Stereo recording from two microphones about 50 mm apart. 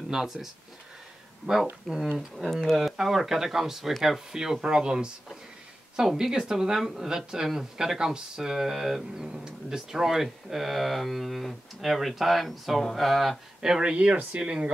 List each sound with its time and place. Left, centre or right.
0.1 s speech: centre
1.5 s speech: right
2.1 s speech: centre
6.1 s speech: centre